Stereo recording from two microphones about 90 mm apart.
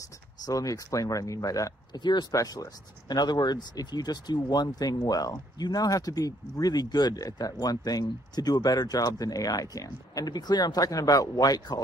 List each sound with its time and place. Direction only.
0.5 s speech: 40° left (ahead or behind)
2.0 s speech: 55° left (ahead or behind)
2.3 s speech: 45° left (ahead or behind)